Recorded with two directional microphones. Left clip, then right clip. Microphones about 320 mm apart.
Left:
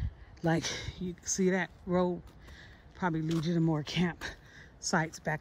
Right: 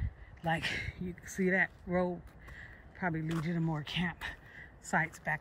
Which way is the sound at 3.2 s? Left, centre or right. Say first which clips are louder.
Left 5 dB; centre.